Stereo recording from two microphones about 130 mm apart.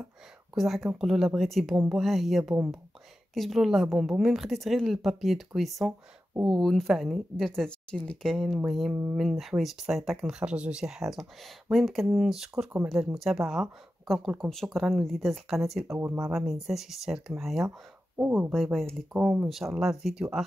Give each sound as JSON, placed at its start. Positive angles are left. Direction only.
{"t": 0.6, "sound": "a woman's voice", "side_deg": 0}
{"t": 16.0, "sound": "speech", "side_deg": -15}
{"t": 16.3, "sound": "a woman's voice", "side_deg": -5}
{"t": 17.6, "sound": "speech", "side_deg": -15}
{"t": 18.5, "sound": "a woman's voice", "side_deg": 0}
{"t": 19.1, "sound": "a woman's voice", "side_deg": -10}